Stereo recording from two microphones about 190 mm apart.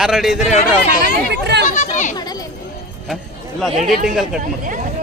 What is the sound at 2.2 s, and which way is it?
Speech, 20° left (ahead or behind).